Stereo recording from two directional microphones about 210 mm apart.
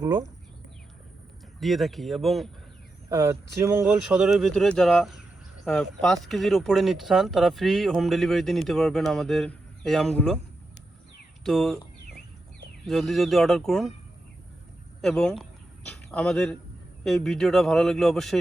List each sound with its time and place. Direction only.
0.0 s speech: 15° right (ahead or behind)
1.5 s speech: centre (ahead or behind)
3.1 s speech: 15° right (ahead or behind); by 10.4 s 5° left (ahead or behind)
11.4 s speech: centre (ahead or behind)
12.8 s speech: centre (ahead or behind)
15.0 s speech: 5° left (ahead or behind)